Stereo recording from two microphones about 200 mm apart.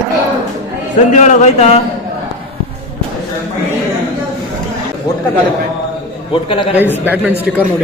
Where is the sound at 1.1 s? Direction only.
35° left (ahead or behind).